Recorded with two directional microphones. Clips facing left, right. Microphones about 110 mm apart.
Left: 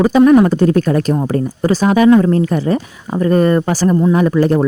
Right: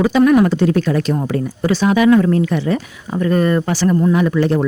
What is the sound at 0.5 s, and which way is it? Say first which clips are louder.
Speech: left 3 dB; 45° left (ahead or behind).